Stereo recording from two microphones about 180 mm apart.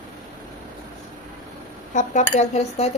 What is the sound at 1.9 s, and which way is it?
Speech, 40° left (ahead or behind).